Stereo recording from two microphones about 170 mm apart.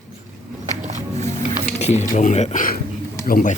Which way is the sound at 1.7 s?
40° left (ahead or behind).